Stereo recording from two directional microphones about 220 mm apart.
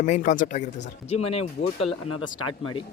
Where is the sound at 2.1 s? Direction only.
80° left.